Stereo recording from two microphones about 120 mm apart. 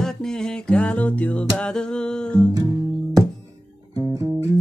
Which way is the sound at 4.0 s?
25° right (ahead or behind).